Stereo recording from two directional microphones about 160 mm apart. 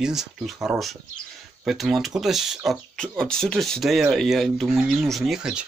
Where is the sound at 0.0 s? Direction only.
5° right (ahead or behind).